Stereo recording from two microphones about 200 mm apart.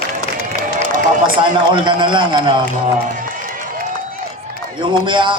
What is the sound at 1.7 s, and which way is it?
Speech, 25° right (ahead or behind).